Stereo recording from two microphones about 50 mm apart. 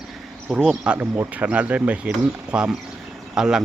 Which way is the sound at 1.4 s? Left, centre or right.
Right.